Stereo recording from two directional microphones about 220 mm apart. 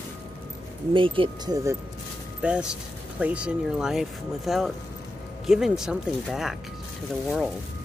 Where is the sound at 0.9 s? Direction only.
25° right (ahead or behind); by 6.5 s centre (ahead or behind).